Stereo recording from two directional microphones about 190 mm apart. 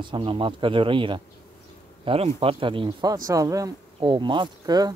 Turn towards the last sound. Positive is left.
turn(degrees=-20)  # may be behind; listen again after turning